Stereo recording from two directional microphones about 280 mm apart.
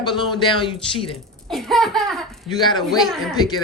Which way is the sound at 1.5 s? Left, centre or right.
Centre.